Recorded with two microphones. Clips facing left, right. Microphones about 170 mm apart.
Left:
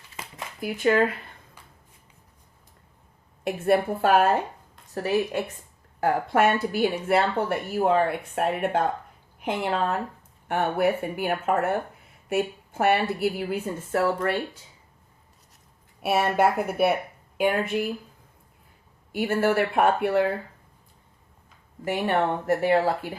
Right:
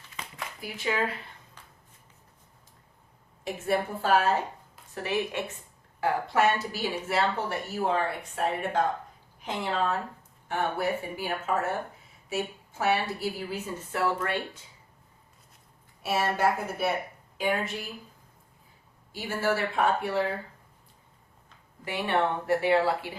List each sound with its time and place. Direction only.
0.6 s a woman's voice: 55° left (ahead or behind)
3.4 s a woman's voice: 60° left (ahead or behind)
4.9 s a woman's voice: 40° left (ahead or behind)
6.0 s a woman's voice: 55° left (ahead or behind)
16.0 s a woman's voice: 60° left (ahead or behind)
19.1 s a woman's voice: 60° left (ahead or behind)
21.8 s speech: 45° left (ahead or behind)